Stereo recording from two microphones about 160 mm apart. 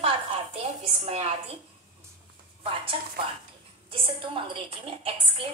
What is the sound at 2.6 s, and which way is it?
A woman's voice, 35° right (ahead or behind).